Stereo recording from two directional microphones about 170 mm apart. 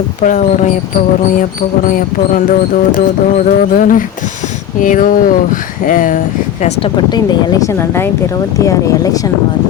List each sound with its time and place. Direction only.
0.2 s speech: 45° left (ahead or behind)
6.6 s speech: 40° left (ahead or behind)
6.9 s speech: 25° left (ahead or behind)